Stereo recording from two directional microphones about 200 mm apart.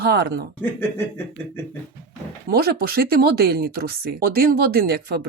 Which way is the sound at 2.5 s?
50° right (ahead or behind).